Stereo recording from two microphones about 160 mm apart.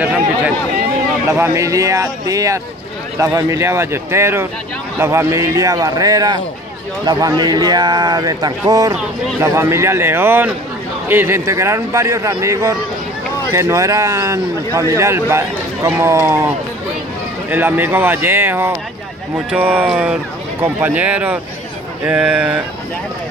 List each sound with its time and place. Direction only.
1.3 s a man's voice: 20° right (ahead or behind)